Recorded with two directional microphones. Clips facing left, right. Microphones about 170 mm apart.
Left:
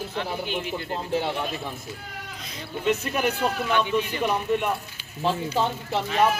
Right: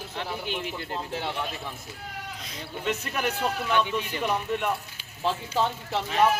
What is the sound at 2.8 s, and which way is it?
A man's voice, 10° left (ahead or behind).